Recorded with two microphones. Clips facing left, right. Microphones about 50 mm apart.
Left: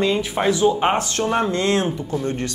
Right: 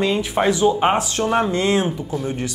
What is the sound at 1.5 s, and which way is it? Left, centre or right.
Speech, centre.